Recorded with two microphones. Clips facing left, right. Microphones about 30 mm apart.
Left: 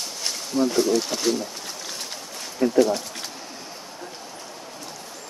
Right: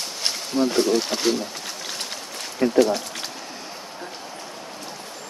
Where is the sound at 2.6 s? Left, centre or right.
Right.